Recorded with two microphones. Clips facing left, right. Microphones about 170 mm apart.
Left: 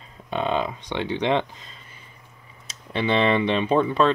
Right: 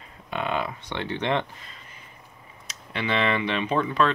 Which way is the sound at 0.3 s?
25° left (ahead or behind).